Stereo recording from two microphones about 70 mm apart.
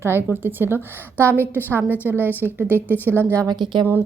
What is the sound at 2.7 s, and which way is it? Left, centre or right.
Speech, left.